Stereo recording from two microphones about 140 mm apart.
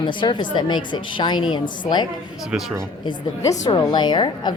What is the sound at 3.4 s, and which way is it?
A woman's voice, 25° left (ahead or behind).